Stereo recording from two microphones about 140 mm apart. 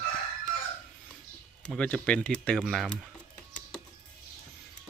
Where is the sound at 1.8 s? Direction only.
10° left (ahead or behind).